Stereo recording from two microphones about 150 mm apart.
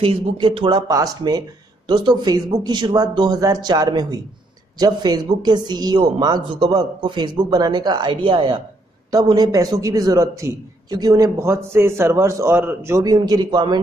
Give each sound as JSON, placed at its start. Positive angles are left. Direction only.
{"t": 0.0, "sound": "a man's voice", "side_deg": -35}